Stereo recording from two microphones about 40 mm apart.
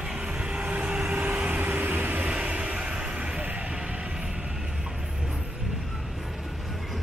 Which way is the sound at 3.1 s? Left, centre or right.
Right.